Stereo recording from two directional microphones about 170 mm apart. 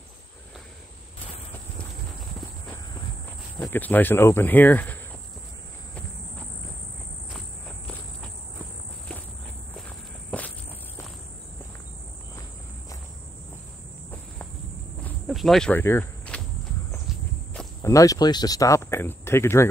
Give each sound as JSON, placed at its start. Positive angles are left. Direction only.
{"t": 3.6, "sound": "speech", "side_deg": 10}
{"t": 7.3, "sound": "insect", "side_deg": 5}
{"t": 15.2, "sound": "cricket", "side_deg": 0}
{"t": 15.8, "sound": "cricket", "side_deg": 15}
{"t": 17.8, "sound": "speech", "side_deg": 20}